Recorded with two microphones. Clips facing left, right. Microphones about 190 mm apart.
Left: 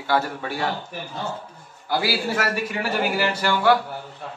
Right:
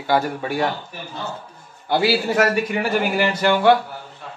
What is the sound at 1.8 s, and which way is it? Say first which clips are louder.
A man's voice: right 5 dB; 25° right (ahead or behind).